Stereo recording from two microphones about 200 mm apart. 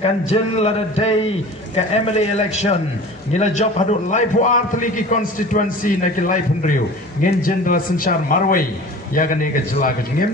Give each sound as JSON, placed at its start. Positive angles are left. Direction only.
{"t": 0.0, "sound": "a man's voice", "side_deg": 35}